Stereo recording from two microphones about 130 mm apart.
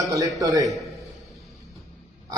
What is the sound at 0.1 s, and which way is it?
Speech, 25° right (ahead or behind).